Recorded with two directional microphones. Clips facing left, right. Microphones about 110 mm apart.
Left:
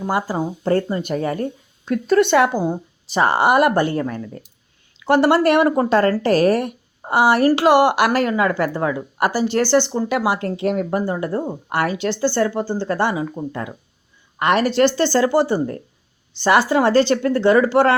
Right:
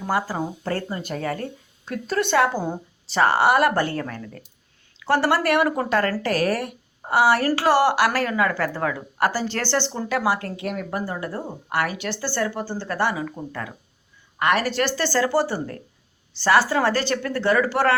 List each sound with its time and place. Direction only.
0.0 s speech: 15° left (ahead or behind)